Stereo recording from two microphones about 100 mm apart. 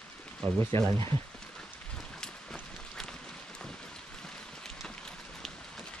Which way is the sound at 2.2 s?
5° left (ahead or behind).